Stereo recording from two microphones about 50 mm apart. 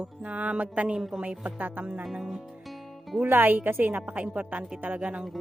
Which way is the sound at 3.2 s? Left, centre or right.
Right.